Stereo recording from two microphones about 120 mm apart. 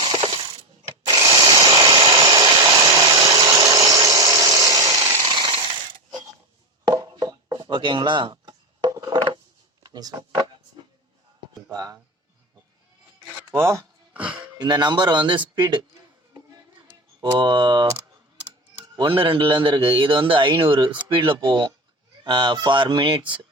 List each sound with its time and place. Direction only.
0.0 s coin: 35° right (ahead or behind)
1.0 s tools: 35° right (ahead or behind)
5.2 s chainsaw: 35° right (ahead or behind)
6.8 s a sound: 30° right (ahead or behind)
9.8 s speech: 30° right (ahead or behind)
11.7 s speech: 30° right (ahead or behind)
13.3 s a sound: 20° right (ahead or behind)
14.1 s a sound: 10° right (ahead or behind)
14.4 s speech: 35° right (ahead or behind)
17.3 s speech: 40° right (ahead or behind)
18.9 s a man's voice: 45° right (ahead or behind)